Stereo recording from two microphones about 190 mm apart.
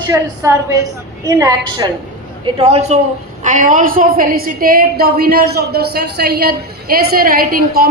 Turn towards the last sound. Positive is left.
turn(degrees=-50)  # may be behind; listen again after turning